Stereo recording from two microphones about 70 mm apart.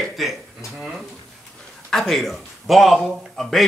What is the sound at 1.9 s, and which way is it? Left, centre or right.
Speech, centre.